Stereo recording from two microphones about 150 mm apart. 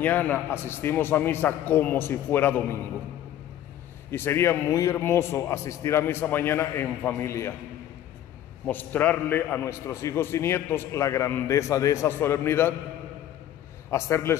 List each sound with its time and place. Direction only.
0.0 s a man's voice: 10° left (ahead or behind)
4.1 s a man's voice: 15° left (ahead or behind)
8.6 s a man's voice: 10° left (ahead or behind)
13.8 s a man's voice: 20° left (ahead or behind)